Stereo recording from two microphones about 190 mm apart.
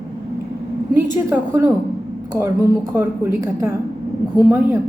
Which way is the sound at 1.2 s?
10° right (ahead or behind).